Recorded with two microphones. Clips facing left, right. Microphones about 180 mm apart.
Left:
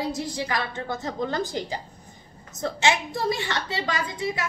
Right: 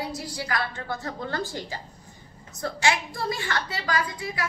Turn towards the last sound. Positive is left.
turn(degrees=25)  # may be behind; listen again after turning